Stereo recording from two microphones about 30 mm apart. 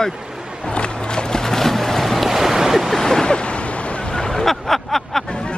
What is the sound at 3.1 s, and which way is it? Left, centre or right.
Waves, left.